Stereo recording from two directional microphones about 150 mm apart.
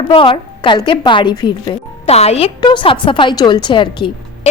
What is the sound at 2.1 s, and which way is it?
Speech, 45° left (ahead or behind).